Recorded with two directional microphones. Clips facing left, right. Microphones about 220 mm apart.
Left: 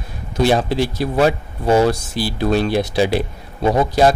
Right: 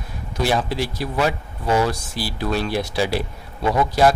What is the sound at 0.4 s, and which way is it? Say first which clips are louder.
Speech: left 6 dB; 25° left (ahead or behind).